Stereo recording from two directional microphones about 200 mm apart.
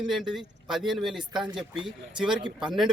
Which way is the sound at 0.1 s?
Centre (ahead or behind).